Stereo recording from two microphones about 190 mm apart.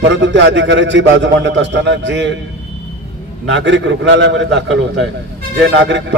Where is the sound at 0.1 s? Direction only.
70° right (ahead or behind).